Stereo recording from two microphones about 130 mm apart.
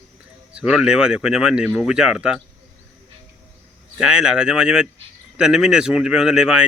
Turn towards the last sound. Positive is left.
turn(degrees=-5)  # may be behind; listen again after turning